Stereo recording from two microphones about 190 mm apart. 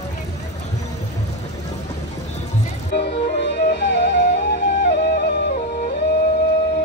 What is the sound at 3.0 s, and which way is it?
Music, 65° left (ahead or behind).